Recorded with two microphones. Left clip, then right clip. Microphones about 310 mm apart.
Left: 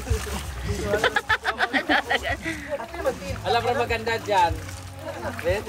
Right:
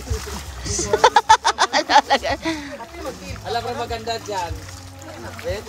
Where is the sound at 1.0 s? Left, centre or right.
Centre.